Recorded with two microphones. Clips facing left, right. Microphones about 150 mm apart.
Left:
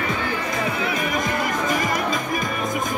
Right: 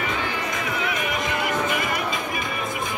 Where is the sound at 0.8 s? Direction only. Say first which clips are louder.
Left 2 dB; 35° left (ahead or behind).